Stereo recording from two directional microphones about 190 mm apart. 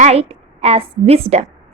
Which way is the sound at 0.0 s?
35° right (ahead or behind).